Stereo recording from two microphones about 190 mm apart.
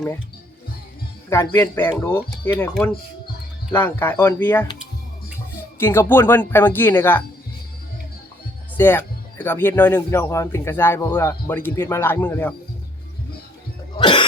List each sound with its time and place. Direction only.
1.3 s speech: 15° left (ahead or behind)
3.7 s speech: 10° left (ahead or behind)
5.8 s speech: 15° left (ahead or behind)
8.8 s speech: 10° left (ahead or behind)
13.9 s cough: 25° left (ahead or behind)